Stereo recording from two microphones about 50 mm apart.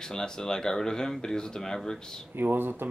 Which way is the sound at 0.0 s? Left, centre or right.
Centre.